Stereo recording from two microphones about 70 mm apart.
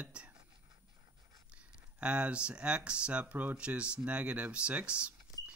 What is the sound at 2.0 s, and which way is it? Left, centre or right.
Speech, centre.